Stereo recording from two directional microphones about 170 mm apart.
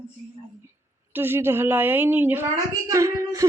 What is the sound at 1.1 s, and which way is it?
A woman's voice, 10° right (ahead or behind).